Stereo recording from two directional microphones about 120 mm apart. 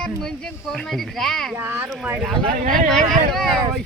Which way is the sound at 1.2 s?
5° left (ahead or behind).